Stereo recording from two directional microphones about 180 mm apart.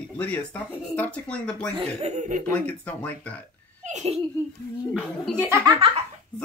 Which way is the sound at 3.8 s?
40° right (ahead or behind).